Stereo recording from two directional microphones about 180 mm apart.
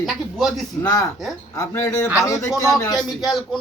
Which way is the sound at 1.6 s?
15° left (ahead or behind).